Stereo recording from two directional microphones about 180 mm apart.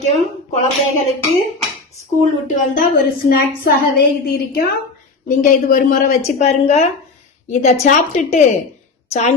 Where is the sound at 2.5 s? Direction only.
50° left (ahead or behind).